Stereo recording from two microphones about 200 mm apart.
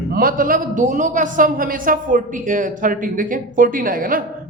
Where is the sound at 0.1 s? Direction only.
45° right (ahead or behind).